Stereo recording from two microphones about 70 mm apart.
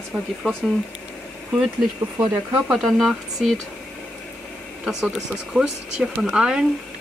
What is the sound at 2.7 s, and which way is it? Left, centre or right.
Speech, centre.